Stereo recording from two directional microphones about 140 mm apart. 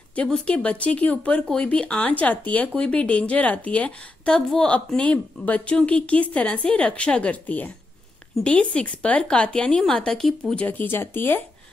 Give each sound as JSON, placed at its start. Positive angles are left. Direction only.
{"t": 0.1, "sound": "speech", "side_deg": 10}